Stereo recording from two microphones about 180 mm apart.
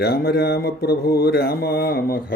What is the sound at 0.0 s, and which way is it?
Speech, 60° left (ahead or behind).